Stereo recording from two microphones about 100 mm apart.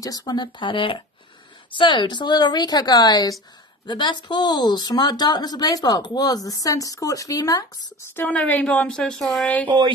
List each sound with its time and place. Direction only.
0.0 s a woman's voice: 35° left (ahead or behind)
8.2 s a woman's voice: 15° left (ahead or behind)
9.7 s speech: 55° right (ahead or behind)